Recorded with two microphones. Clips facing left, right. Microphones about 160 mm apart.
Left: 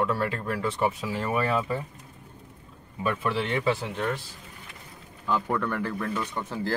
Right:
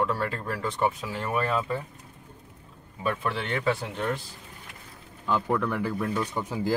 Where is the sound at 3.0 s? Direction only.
Centre (ahead or behind).